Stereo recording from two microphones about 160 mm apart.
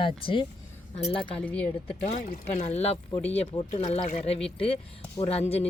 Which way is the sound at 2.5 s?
40° left (ahead or behind).